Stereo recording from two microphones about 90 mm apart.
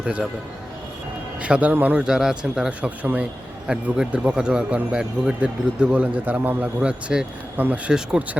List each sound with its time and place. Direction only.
0.0 s a man's voice: 10° right (ahead or behind)
1.4 s a man's voice: 15° right (ahead or behind)
2.0 s a man's voice: 5° right (ahead or behind)